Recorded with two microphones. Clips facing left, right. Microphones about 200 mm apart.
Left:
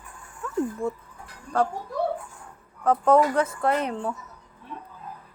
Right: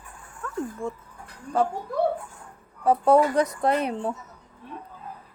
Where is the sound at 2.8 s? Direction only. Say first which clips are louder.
Right 1 dB; 10° right (ahead or behind).